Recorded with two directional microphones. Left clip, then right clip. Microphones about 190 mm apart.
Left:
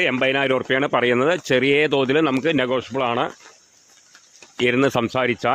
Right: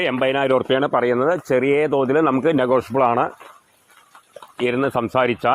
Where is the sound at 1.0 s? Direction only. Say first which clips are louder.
Even; 25° left (ahead or behind).